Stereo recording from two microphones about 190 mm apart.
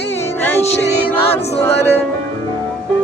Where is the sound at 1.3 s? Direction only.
35° left (ahead or behind).